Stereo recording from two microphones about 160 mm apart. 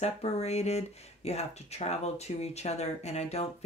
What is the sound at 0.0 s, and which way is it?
Speech, 40° left (ahead or behind).